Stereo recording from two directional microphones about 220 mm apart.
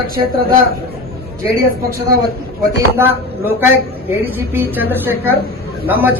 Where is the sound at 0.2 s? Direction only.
20° right (ahead or behind).